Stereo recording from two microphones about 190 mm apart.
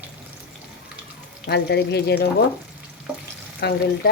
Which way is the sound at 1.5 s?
60° left (ahead or behind).